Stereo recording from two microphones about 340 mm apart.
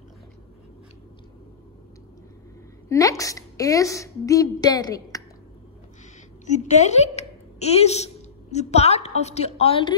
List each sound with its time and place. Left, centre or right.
2.9 s a woman's voice: centre
6.4 s a woman's voice: left